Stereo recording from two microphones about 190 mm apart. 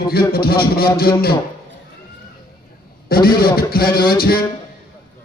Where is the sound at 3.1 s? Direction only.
50° left (ahead or behind).